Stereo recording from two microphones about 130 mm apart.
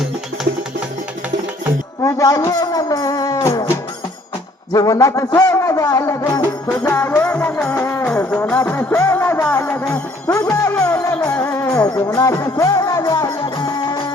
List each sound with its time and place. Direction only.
2.0 s a man's voice: 25° left (ahead or behind)
4.7 s music: 25° left (ahead or behind)
7.2 s music: 10° left (ahead or behind)
10.2 s music: 25° left (ahead or behind)